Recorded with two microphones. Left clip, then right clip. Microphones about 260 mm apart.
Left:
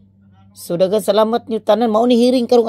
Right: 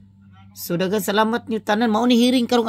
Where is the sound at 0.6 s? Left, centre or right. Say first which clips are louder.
Left 7 dB; centre.